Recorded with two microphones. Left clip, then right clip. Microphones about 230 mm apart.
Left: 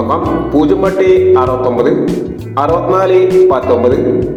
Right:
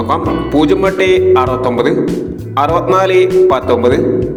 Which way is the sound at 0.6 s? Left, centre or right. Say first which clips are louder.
Even; right.